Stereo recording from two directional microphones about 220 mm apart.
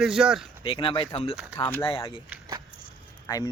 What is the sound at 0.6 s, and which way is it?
Speech, 25° left (ahead or behind).